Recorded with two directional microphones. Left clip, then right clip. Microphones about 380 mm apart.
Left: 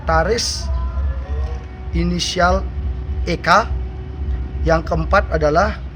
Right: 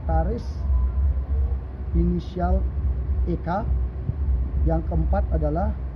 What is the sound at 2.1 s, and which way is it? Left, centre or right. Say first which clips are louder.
A man's voice: left 17 dB; centre.